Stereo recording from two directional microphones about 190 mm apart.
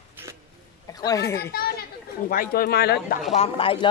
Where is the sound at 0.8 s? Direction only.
20° left (ahead or behind).